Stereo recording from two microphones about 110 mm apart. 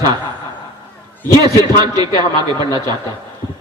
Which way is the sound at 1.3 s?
35° right (ahead or behind).